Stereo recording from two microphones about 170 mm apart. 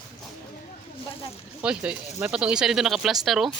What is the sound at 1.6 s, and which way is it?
Speech, 5° right (ahead or behind).